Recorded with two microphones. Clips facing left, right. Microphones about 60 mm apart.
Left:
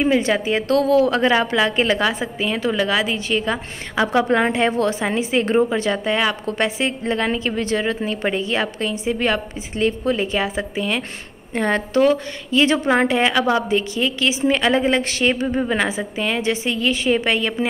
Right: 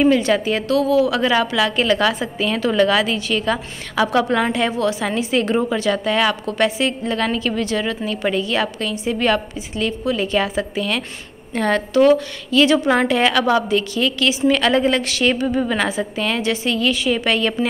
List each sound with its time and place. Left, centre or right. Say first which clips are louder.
0.0 s a woman's voice: right 2 dB; centre
0.7 s a woman's voice: left 1 dB; left
1.3 s a woman's voice: even; left
5.0 s a woman's voice: even; left
9.8 s a woman's voice: left 1 dB; left
15.4 s a woman's voice: right 1 dB; centre
17.4 s a woman's voice: right 2 dB; centre